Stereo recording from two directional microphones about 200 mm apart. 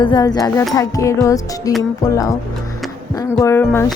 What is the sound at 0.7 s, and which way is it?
Music, 15° left (ahead or behind).